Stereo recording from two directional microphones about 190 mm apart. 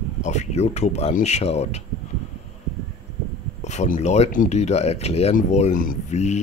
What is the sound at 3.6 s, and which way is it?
Speech, 35° left (ahead or behind).